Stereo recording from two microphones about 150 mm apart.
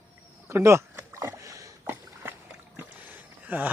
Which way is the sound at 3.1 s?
10° right (ahead or behind).